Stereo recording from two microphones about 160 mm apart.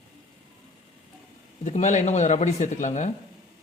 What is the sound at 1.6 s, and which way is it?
Speech, 50° left (ahead or behind).